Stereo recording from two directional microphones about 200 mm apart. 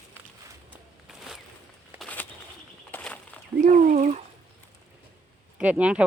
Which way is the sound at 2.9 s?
5° left (ahead or behind).